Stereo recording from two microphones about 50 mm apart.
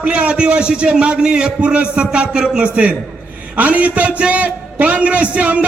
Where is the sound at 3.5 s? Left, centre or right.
Right.